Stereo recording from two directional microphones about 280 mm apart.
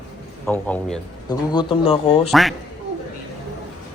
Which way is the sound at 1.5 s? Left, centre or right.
Centre.